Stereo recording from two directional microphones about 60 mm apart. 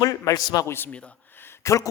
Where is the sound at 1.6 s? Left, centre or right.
Left.